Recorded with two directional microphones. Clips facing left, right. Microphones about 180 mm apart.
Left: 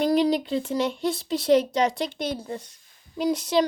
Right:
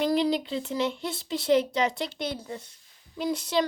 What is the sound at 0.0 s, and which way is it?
Speech, 40° left (ahead or behind).